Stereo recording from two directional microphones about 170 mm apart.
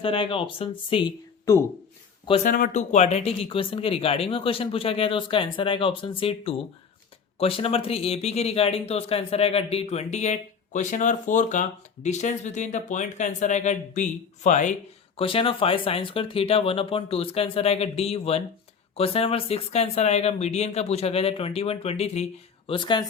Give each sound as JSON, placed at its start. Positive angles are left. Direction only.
{"t": 0.0, "sound": "a man's voice", "side_deg": 30}
{"t": 2.4, "sound": "a man's voice", "side_deg": 50}